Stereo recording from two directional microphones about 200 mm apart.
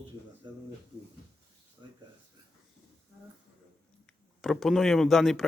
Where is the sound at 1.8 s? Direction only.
20° right (ahead or behind).